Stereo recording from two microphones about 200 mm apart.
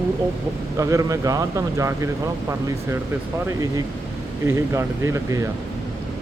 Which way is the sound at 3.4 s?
15° right (ahead or behind).